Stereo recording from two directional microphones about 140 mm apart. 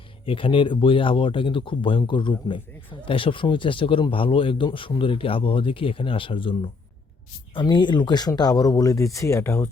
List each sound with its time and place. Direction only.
0.3 s speech: 40° left (ahead or behind); by 9.6 s 20° left (ahead or behind)